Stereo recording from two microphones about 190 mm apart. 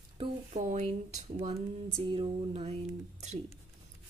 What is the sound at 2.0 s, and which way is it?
Speech, 25° right (ahead or behind).